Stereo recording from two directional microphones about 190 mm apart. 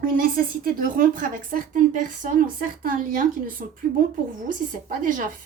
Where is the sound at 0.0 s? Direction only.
50° right (ahead or behind).